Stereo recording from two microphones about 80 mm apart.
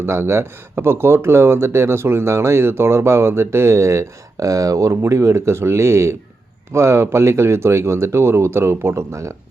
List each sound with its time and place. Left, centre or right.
0.0 s speech: right